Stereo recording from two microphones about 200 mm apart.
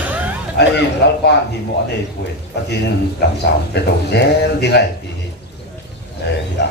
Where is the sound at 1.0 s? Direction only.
55° left (ahead or behind).